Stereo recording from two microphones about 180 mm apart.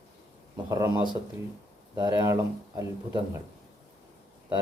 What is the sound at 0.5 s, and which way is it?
Speech, 20° right (ahead or behind).